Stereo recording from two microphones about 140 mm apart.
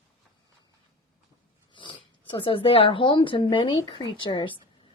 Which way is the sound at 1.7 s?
35° left (ahead or behind).